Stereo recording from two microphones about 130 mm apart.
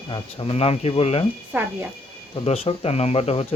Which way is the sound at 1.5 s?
15° right (ahead or behind).